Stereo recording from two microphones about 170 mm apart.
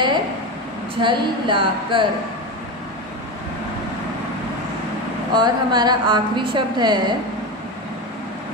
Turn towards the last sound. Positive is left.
turn(degrees=-25)  # may be behind; listen again after turning